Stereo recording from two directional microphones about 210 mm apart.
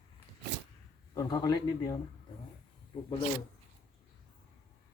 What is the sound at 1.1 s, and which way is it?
Speech, 20° left (ahead or behind).